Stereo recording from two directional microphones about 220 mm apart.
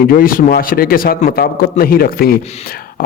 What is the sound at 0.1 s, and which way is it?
A man's voice, 40° left (ahead or behind).